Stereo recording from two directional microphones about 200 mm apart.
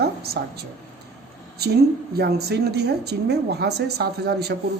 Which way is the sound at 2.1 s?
55° right (ahead or behind).